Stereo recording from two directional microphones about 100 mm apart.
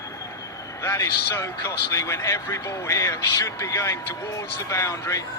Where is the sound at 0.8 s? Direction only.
25° left (ahead or behind).